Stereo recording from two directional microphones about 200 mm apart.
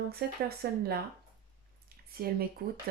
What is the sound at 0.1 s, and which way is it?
Speech, 50° right (ahead or behind).